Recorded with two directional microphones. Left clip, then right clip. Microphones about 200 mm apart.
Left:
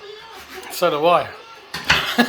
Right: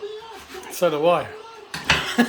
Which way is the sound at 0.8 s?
15° right (ahead or behind).